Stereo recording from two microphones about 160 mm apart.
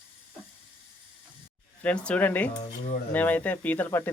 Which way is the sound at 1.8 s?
10° left (ahead or behind).